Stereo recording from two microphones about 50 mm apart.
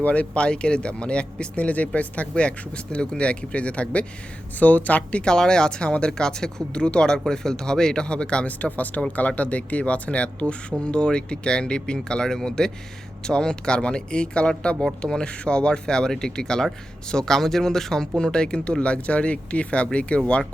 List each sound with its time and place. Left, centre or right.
0.0 s speech: left
5.2 s speech: centre
8.4 s speech: left